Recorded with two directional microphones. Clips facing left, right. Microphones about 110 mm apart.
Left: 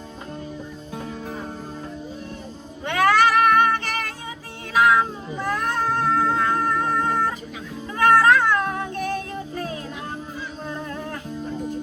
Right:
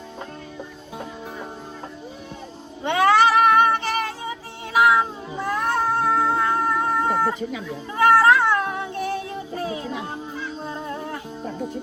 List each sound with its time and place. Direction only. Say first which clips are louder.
2.8 s music: right 1 dB; 20° right (ahead or behind)
4.7 s cat: even; 15° right (ahead or behind)
10.7 s humming: left 1 dB; 20° right (ahead or behind)